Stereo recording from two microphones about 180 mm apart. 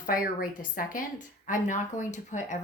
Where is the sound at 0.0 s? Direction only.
50° left (ahead or behind).